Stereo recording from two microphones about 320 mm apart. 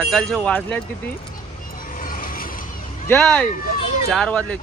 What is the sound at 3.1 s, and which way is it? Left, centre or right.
Speech, centre.